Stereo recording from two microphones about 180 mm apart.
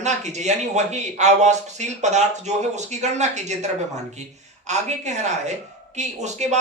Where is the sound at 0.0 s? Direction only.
40° right (ahead or behind).